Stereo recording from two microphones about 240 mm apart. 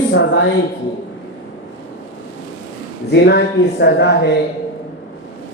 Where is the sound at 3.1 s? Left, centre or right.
Left.